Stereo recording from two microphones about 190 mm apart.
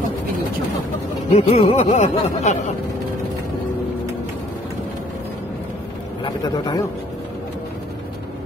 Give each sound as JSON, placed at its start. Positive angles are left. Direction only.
{"t": 1.3, "sound": "speech", "side_deg": 30}
{"t": 6.2, "sound": "a man's voice", "side_deg": 20}